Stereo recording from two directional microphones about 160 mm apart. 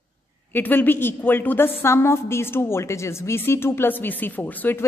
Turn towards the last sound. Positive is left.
turn(degrees=10)  # may be behind; listen again after turning